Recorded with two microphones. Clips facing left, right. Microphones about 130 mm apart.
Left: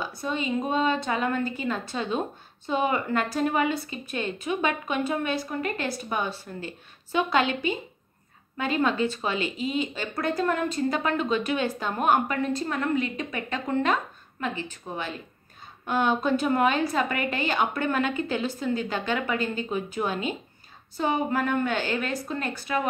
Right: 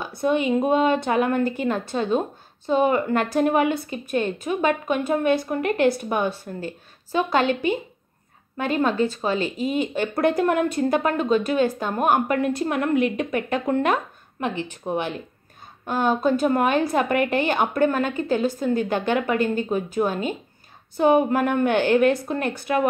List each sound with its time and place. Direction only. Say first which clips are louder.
0.0 s speech: right 8 dB; 60° right (ahead or behind)
3.2 s speech: right 4 dB; 60° right (ahead or behind)
11.0 s speech: right 4 dB; 5° right (ahead or behind)
11.2 s speech: right 6 dB; 45° right (ahead or behind)
12.3 s speech: right 5 dB; 60° right (ahead or behind)
15.9 s speech: right 3 dB; 40° right (ahead or behind)
16.6 s speech: right 3 dB; 55° right (ahead or behind)
20.9 s speech: right 8 dB; 60° right (ahead or behind)